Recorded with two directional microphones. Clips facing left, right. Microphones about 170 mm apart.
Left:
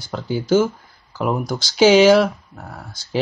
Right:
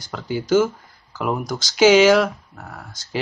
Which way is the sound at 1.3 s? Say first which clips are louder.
Left 2 dB; 10° left (ahead or behind).